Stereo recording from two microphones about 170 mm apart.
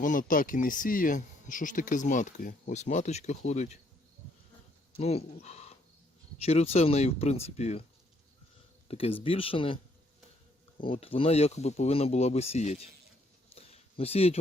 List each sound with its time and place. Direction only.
0.0 s speech: 50° left (ahead or behind)
4.9 s speech: 35° left (ahead or behind)
8.9 s speech: 35° left (ahead or behind)
10.8 s speech: 35° left (ahead or behind)
13.5 s a sound: 35° left (ahead or behind)